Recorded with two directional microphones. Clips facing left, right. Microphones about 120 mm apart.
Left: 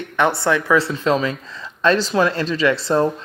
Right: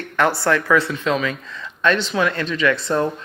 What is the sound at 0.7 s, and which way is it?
Speech, 30° left (ahead or behind).